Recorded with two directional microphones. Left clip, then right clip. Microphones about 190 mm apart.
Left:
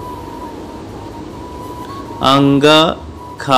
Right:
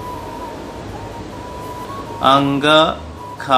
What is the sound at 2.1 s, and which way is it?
Speech, 20° left (ahead or behind).